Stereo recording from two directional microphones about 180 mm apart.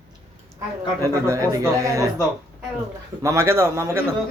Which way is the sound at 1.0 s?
15° right (ahead or behind).